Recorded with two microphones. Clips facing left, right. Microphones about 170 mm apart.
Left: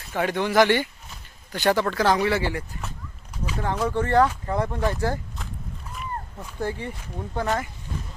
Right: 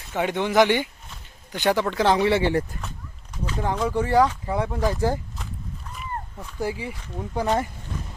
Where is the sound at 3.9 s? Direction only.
10° right (ahead or behind).